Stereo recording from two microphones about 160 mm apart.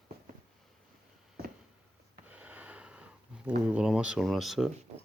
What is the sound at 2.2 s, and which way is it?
Sniff, 10° right (ahead or behind).